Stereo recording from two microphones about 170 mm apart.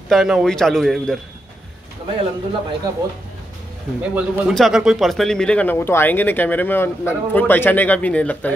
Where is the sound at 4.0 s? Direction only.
10° right (ahead or behind).